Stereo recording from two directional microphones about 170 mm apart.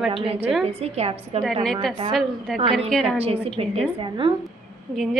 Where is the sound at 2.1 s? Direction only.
Centre (ahead or behind).